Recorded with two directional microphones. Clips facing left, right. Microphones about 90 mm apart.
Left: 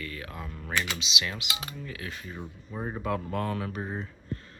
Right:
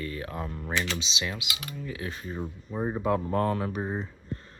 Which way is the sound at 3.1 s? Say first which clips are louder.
Right 4 dB; 25° right (ahead or behind).